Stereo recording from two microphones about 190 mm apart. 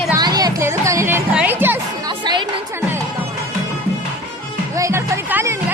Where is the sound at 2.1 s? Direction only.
25° right (ahead or behind).